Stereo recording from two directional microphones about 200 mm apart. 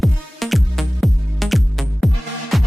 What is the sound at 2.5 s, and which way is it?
Music, centre (ahead or behind).